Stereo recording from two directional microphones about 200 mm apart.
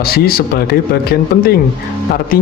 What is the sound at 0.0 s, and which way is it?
Speech, 50° left (ahead or behind).